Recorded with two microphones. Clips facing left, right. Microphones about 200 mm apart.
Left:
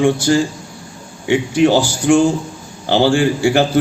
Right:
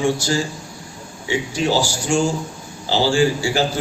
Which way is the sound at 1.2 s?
60° left (ahead or behind).